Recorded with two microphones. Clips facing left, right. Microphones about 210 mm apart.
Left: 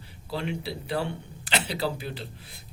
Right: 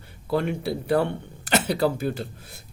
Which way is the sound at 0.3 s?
50° right (ahead or behind).